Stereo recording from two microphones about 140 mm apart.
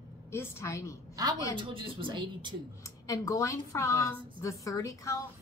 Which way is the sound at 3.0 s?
25° left (ahead or behind).